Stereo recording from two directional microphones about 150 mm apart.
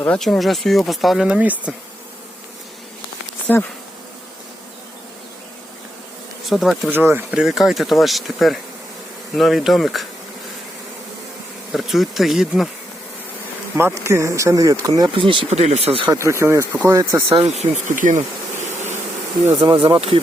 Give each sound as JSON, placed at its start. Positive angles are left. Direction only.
{"t": 0.0, "sound": "speech", "side_deg": 5}
{"t": 3.4, "sound": "speech", "side_deg": 15}
{"t": 6.4, "sound": "speech", "side_deg": 0}
{"t": 6.9, "sound": "speech", "side_deg": -15}
{"t": 11.7, "sound": "speech", "side_deg": 0}
{"t": 13.7, "sound": "speech", "side_deg": -15}
{"t": 15.4, "sound": "speech", "side_deg": -50}
{"t": 16.0, "sound": "speech", "side_deg": -20}
{"t": 17.6, "sound": "speech", "side_deg": -60}
{"t": 19.6, "sound": "speech", "side_deg": -35}